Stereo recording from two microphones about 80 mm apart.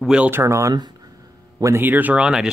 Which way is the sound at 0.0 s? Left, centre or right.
Centre.